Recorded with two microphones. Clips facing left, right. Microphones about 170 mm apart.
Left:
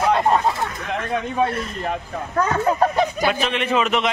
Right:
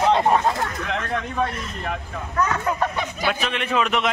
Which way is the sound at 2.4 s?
35° left (ahead or behind).